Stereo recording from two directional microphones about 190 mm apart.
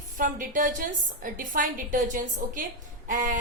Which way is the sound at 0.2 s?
45° right (ahead or behind).